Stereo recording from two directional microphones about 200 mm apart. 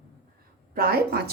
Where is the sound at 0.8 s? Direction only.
50° right (ahead or behind).